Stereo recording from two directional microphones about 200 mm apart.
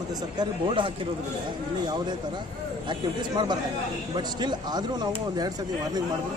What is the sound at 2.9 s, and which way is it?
Speech, 20° right (ahead or behind).